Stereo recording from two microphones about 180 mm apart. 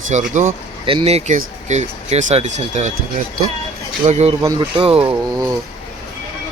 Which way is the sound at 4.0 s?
35° right (ahead or behind).